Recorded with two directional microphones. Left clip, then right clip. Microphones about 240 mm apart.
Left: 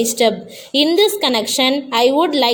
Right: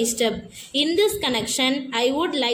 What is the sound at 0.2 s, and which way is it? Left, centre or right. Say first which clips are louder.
A woman's voice: left 8 dB; left.